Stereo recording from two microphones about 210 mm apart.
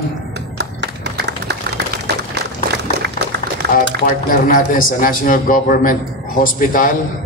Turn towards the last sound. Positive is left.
turn(degrees=40)  # may be behind; listen again after turning